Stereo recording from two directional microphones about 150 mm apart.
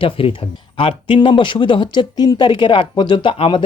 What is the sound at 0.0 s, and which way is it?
Speech, 35° left (ahead or behind).